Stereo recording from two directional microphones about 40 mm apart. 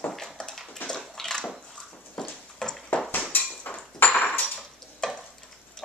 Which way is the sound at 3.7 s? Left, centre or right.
Left.